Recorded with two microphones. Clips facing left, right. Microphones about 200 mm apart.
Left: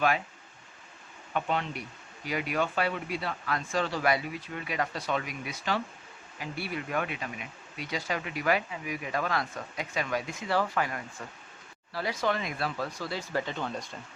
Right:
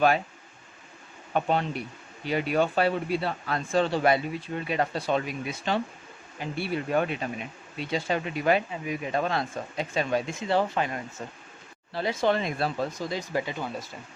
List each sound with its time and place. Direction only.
1.3 s speech: 35° right (ahead or behind); by 13.9 s 5° right (ahead or behind)